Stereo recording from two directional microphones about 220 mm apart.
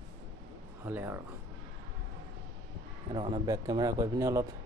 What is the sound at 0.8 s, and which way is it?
Speech, 10° right (ahead or behind).